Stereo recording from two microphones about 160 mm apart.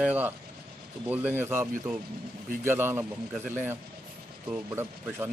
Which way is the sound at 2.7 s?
15° right (ahead or behind).